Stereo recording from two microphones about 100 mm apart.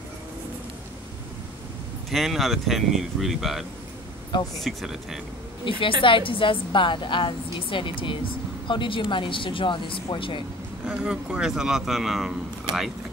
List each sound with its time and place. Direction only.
2.0 s speech: centre (ahead or behind)
5.7 s a woman's voice: 60° left (ahead or behind)
10.9 s speech: 10° right (ahead or behind)